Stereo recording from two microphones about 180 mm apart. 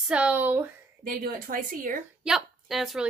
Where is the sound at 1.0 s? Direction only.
50° right (ahead or behind).